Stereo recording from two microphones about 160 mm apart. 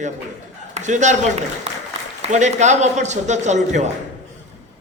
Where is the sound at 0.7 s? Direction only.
50° right (ahead or behind).